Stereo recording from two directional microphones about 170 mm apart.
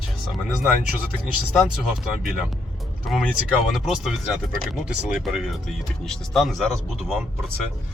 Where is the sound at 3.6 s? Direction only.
Centre (ahead or behind).